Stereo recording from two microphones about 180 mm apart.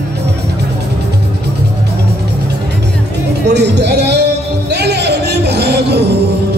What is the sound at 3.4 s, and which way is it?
Music, 70° right (ahead or behind).